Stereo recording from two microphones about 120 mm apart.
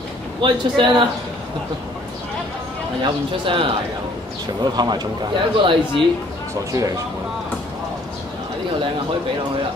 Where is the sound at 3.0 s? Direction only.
45° right (ahead or behind).